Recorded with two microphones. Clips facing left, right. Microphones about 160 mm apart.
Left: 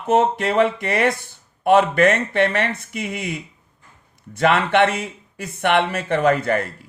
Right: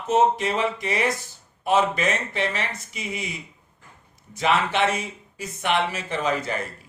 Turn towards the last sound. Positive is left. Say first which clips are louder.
# left 8 dB
turn(degrees=60)  # may be behind; listen again after turning